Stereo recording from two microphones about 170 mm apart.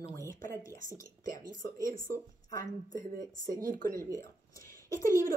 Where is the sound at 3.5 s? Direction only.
50° right (ahead or behind).